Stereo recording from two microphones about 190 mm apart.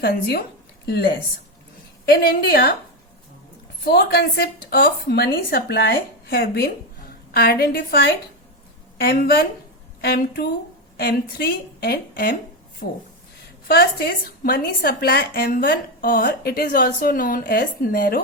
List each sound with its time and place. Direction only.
0.0 s a woman's voice: 55° left (ahead or behind)
2.0 s a woman's voice: 55° left (ahead or behind)
3.8 s a woman's voice: 55° left (ahead or behind)
13.7 s a woman's voice: 55° left (ahead or behind)